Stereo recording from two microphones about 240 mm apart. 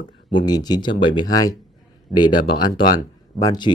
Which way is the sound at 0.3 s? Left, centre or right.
Centre.